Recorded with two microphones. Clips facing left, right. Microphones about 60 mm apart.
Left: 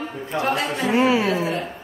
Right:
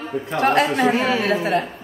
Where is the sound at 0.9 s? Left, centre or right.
Centre.